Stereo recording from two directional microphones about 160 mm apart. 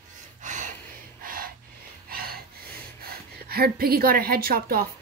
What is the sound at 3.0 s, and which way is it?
A woman's voice, 75° right (ahead or behind).